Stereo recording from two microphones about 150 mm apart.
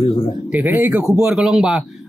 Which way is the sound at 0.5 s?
10° right (ahead or behind).